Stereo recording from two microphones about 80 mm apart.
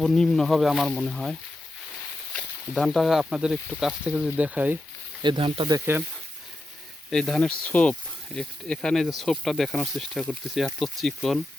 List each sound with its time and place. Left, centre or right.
0.0 s speech: centre
2.7 s speech: centre; by 4.8 s right
5.2 s speech: right
5.9 s speech: right
7.1 s speech: centre